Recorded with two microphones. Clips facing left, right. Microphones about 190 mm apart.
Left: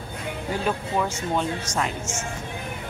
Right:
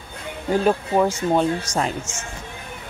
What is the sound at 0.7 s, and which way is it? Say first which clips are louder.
Speech: right 6 dB; 40° right (ahead or behind).